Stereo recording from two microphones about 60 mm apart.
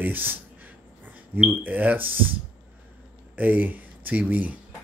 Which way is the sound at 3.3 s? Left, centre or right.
Right.